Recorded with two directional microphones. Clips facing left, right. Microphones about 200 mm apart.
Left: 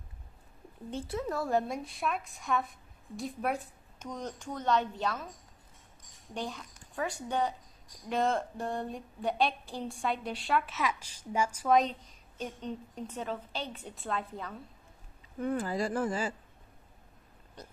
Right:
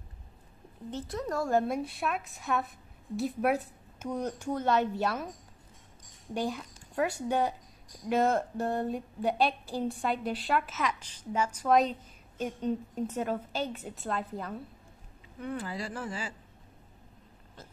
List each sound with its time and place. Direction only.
1.1 s a woman's voice: 5° left (ahead or behind)
6.5 s a woman's voice: 10° right (ahead or behind); by 11.7 s 10° left (ahead or behind)
11.7 s a woman's voice: centre (ahead or behind)
15.4 s speech: 45° left (ahead or behind)